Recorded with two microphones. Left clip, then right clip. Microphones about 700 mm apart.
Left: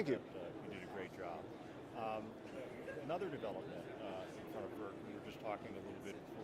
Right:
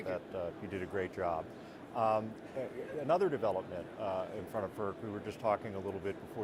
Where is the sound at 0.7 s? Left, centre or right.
Right.